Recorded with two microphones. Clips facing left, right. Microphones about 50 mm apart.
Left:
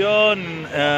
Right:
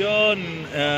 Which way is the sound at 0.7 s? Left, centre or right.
Left.